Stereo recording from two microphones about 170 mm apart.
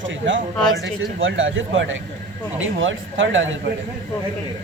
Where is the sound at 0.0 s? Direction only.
90° right.